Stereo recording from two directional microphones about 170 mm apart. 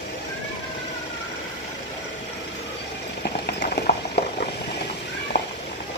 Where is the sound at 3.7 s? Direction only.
65° left (ahead or behind).